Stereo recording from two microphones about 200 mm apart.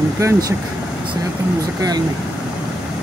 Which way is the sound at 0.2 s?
15° right (ahead or behind).